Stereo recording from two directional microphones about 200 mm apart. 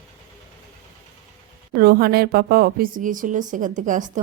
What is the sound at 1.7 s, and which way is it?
A woman's voice, 50° right (ahead or behind).